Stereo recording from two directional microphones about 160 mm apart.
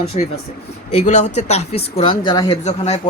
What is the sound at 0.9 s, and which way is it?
Speech, 45° left (ahead or behind).